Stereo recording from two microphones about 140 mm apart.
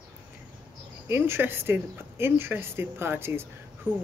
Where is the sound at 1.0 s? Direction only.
15° right (ahead or behind).